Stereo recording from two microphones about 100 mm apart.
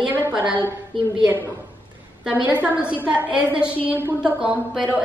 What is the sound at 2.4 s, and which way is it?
A woman's voice, 15° right (ahead or behind).